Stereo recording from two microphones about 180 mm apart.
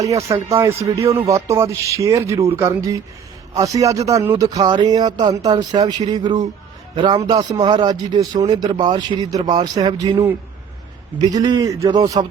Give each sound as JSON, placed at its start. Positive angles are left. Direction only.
{"t": 0.0, "sound": "speech", "side_deg": -15}